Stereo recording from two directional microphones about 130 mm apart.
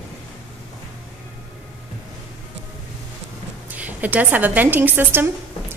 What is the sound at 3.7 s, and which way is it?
A woman's voice, 10° right (ahead or behind).